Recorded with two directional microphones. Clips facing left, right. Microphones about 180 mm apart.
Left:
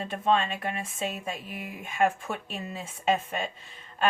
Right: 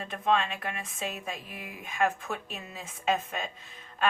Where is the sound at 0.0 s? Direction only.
25° left (ahead or behind).